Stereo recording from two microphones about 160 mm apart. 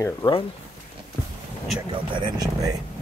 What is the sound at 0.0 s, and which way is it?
Speech, 20° left (ahead or behind).